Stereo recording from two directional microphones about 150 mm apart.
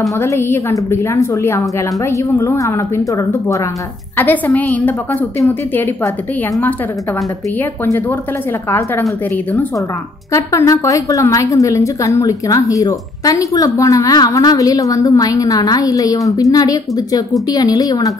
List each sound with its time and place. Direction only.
0.2 s a woman's voice: 15° left (ahead or behind)
4.2 s a woman's voice: 10° left (ahead or behind)
7.8 s a woman's voice: 15° left (ahead or behind)